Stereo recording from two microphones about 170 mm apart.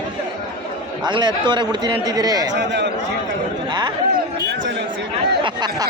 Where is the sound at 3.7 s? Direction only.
25° right (ahead or behind).